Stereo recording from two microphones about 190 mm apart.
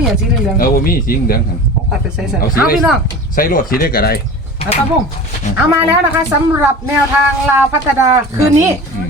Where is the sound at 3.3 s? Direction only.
50° left (ahead or behind).